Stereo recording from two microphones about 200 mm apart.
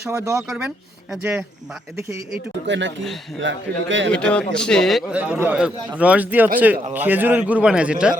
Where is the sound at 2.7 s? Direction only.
65° right (ahead or behind).